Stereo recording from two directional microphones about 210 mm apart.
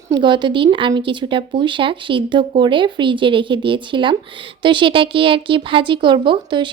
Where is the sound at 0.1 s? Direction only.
20° right (ahead or behind).